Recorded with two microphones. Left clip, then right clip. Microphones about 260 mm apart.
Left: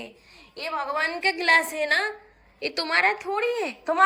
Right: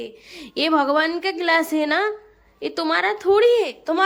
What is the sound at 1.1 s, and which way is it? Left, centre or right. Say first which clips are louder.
A woman's voice: right 1 dB; centre.